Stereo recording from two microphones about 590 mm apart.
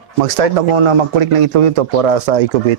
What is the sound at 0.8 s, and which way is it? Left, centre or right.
Speech, right.